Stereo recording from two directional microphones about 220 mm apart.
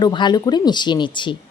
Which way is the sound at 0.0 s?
20° left (ahead or behind).